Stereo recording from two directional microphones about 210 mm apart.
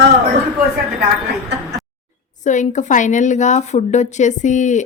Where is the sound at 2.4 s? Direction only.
35° left (ahead or behind).